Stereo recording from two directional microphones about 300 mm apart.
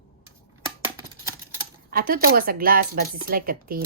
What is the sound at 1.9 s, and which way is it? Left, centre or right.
Speech, right.